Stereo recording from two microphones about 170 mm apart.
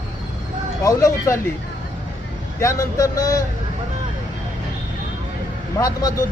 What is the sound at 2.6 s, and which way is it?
Speech, 15° left (ahead or behind).